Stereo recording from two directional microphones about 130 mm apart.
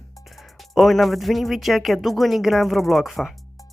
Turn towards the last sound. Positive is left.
turn(degrees=0)  # may be behind; listen again after turning